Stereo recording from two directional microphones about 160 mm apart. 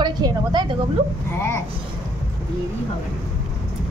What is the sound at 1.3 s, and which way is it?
Speech, 15° left (ahead or behind).